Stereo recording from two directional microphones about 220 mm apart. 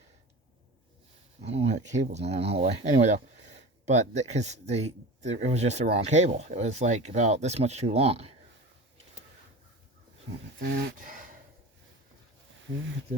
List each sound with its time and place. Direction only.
1.4 s speech: 30° right (ahead or behind)
10.6 s speech: 45° right (ahead or behind)